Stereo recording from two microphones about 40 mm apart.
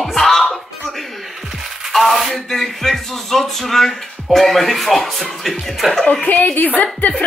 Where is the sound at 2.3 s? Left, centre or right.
Centre.